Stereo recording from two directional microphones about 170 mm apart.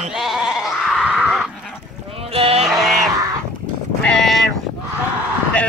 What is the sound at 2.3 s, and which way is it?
Music, 35° right (ahead or behind).